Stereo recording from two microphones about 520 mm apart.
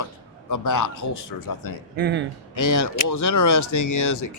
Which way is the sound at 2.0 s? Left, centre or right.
Centre.